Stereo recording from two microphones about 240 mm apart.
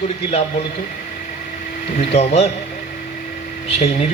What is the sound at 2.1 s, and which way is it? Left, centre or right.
Speech, left.